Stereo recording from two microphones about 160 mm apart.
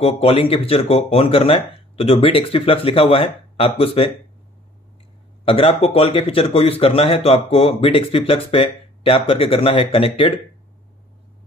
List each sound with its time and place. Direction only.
0.0 s speech: 40° left (ahead or behind)
5.4 s speech: 35° left (ahead or behind)